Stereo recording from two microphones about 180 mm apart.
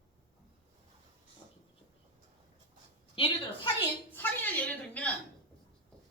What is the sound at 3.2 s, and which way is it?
Speech, 30° left (ahead or behind).